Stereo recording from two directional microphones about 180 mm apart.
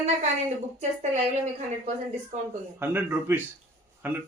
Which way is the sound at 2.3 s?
40° right (ahead or behind).